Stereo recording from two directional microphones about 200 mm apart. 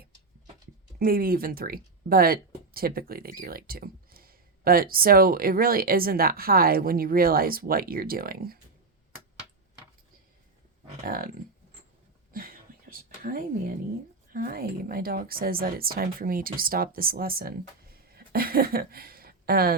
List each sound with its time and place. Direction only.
0.9 s speech: 45° right (ahead or behind)
11.0 s speech: 45° right (ahead or behind)
12.3 s a sound: 45° right (ahead or behind)
14.3 s speech: 45° right (ahead or behind)